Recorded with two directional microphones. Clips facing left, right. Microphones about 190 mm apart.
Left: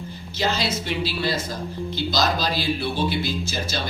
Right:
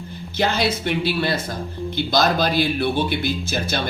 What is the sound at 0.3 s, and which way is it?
A man's voice, 60° right (ahead or behind).